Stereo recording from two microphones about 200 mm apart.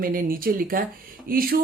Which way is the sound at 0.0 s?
45° right (ahead or behind).